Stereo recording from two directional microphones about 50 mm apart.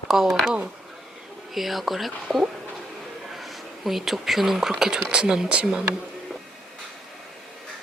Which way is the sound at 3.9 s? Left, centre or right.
Centre.